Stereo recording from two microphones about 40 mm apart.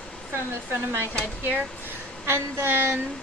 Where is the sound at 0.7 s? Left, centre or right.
Right.